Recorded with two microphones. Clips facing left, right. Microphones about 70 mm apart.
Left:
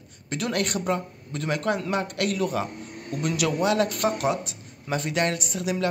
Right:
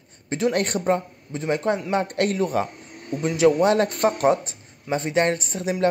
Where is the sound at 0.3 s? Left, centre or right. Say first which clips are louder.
Right 5 dB; right.